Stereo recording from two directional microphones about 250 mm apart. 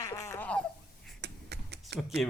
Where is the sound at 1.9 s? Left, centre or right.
Centre.